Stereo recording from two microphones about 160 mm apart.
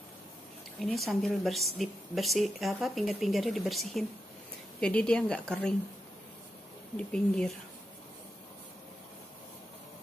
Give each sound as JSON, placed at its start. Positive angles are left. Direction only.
{"t": 0.7, "sound": "a woman's voice", "side_deg": 0}
{"t": 7.0, "sound": "speech", "side_deg": 5}